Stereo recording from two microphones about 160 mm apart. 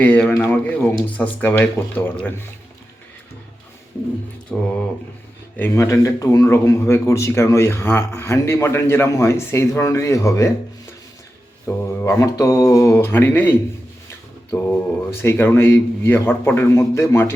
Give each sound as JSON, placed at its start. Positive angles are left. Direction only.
{"t": 0.0, "sound": "speech", "side_deg": 10}
{"t": 4.5, "sound": "speech", "side_deg": 5}
{"t": 5.5, "sound": "speech", "side_deg": 15}
{"t": 11.6, "sound": "speech", "side_deg": 15}